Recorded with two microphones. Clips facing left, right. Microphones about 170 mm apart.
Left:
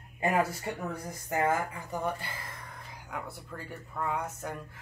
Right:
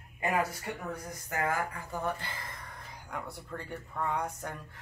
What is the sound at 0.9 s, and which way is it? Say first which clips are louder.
Speech: left 4 dB; 25° left (ahead or behind).